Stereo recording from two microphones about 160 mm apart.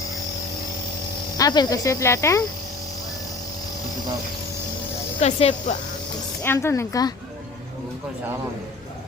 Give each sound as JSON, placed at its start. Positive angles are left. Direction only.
{"t": 1.4, "sound": "speech", "side_deg": 25}
{"t": 5.2, "sound": "speech", "side_deg": 45}
{"t": 6.4, "sound": "a woman's voice", "side_deg": 15}